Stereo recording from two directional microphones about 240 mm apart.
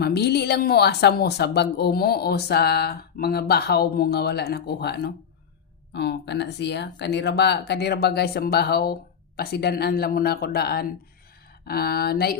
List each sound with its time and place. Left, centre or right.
0.0 s speech: left